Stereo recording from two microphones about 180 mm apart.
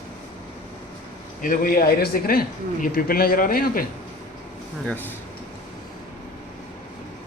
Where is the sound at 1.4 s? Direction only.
50° left (ahead or behind).